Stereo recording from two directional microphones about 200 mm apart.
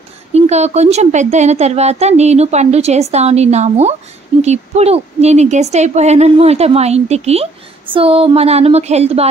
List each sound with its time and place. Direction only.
0.3 s speech: 35° right (ahead or behind)